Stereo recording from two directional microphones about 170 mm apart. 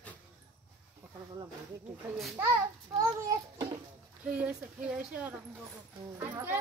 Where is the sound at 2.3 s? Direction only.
15° right (ahead or behind).